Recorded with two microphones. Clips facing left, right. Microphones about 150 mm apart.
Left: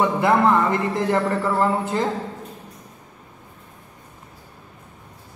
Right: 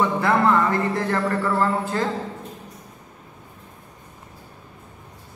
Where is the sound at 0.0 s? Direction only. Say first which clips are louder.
Left 2 dB; 20° left (ahead or behind).